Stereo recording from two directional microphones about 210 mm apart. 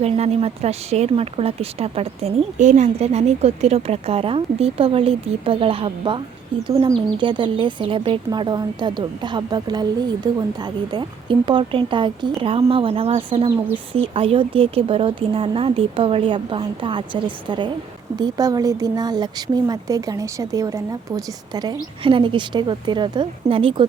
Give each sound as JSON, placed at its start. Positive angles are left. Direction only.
{"t": 0.0, "sound": "a woman's voice", "side_deg": -30}